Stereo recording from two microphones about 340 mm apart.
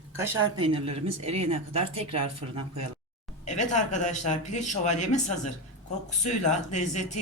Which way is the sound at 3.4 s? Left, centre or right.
Left.